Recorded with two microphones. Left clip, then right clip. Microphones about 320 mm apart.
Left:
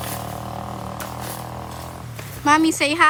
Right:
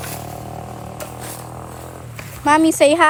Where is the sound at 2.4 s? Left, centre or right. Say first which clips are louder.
Right 4 dB; centre.